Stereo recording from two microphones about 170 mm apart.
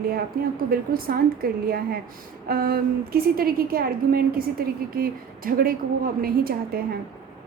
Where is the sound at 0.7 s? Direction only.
60° right (ahead or behind).